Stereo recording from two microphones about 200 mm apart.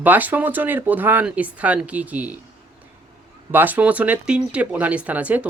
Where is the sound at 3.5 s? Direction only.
10° right (ahead or behind).